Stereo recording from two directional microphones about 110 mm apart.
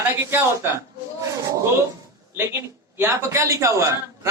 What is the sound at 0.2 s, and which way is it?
Speech, 20° right (ahead or behind).